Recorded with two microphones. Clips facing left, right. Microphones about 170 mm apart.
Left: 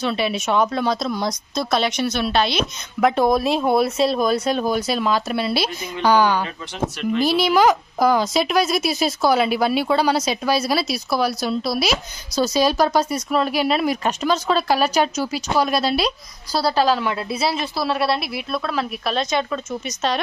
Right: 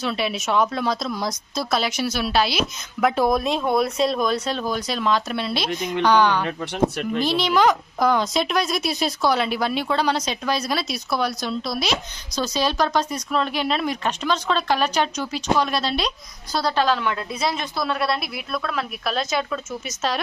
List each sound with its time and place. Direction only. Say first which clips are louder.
0.0 s a woman's voice: left 3 dB; centre (ahead or behind)
5.7 s a woman's voice: right 5 dB; 70° right (ahead or behind)
6.0 s speech: left 2 dB; 5° left (ahead or behind)
6.4 s speech: right 4 dB; 60° right (ahead or behind)
7.2 s a woman's voice: left 3 dB; 10° left (ahead or behind)